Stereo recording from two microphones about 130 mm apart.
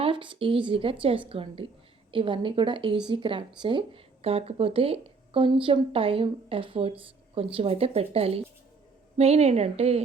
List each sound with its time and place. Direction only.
0.0 s a woman's voice: 40° right (ahead or behind)